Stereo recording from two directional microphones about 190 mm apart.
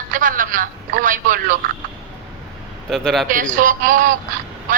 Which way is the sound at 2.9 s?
Centre (ahead or behind).